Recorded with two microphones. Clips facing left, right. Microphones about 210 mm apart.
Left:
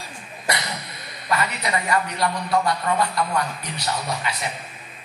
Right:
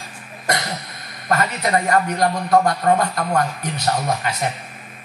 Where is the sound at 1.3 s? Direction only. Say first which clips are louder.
Right 5 dB; 45° right (ahead or behind).